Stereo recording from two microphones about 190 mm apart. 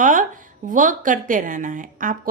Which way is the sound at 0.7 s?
45° right (ahead or behind).